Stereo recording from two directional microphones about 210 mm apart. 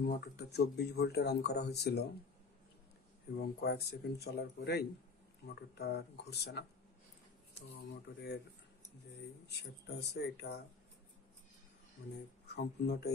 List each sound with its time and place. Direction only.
0.0 s speech: 50° left (ahead or behind)
3.3 s speech: 50° left (ahead or behind)
9.5 s speech: 55° left (ahead or behind)
12.4 s speech: 50° left (ahead or behind)